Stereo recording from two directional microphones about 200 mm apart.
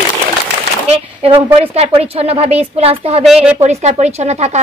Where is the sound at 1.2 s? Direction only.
30° right (ahead or behind).